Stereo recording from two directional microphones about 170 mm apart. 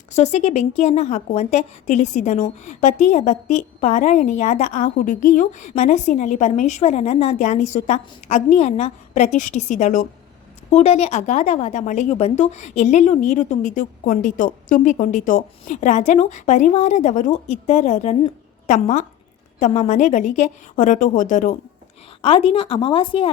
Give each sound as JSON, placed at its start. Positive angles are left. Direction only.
{"t": 0.1, "sound": "a woman's voice", "side_deg": 40}
{"t": 22.2, "sound": "speech", "side_deg": 35}